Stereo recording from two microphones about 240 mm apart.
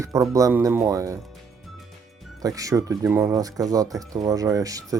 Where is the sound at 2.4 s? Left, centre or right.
Centre.